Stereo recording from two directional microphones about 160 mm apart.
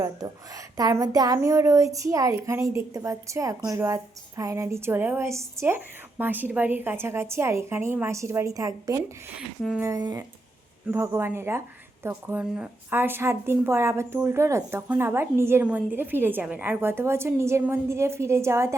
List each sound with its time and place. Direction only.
0.0 s a woman's voice: 20° right (ahead or behind)